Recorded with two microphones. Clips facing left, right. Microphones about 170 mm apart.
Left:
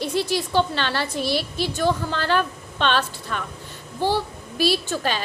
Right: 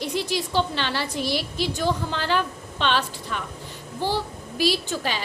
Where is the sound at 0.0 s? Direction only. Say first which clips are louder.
Left 3 dB; 15° right (ahead or behind).